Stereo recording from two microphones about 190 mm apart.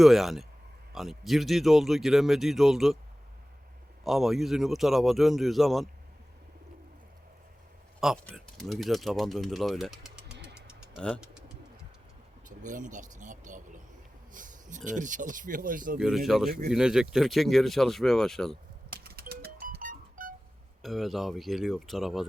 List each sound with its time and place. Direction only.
0.0 s speech: centre (ahead or behind)
4.0 s speech: centre (ahead or behind)
8.0 s speech: 5° left (ahead or behind)
10.9 s vehicle: 5° left (ahead or behind)
12.5 s a sound: 40° right (ahead or behind)
14.8 s speech: 40° right (ahead or behind)
16.0 s speech: centre (ahead or behind)
16.5 s speech: 50° right (ahead or behind)
16.7 s speech: 5° right (ahead or behind)
19.0 s music: 55° right (ahead or behind)
20.8 s speech: centre (ahead or behind)